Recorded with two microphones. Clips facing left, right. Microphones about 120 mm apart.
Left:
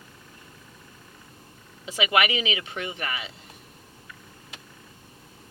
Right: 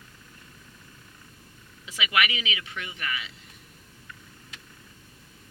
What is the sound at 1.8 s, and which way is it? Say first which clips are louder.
Speech: left 4 dB; 30° left (ahead or behind).